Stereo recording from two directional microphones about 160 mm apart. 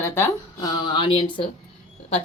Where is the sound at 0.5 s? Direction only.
25° left (ahead or behind).